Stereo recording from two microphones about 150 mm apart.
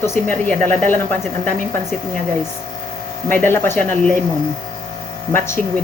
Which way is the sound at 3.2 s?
15° left (ahead or behind).